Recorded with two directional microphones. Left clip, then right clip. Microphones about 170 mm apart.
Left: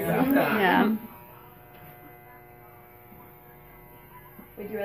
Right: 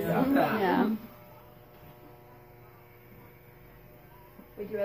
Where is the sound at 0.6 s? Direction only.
15° left (ahead or behind).